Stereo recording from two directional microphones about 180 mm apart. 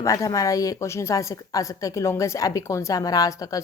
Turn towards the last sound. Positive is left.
turn(degrees=20)  # may be behind; listen again after turning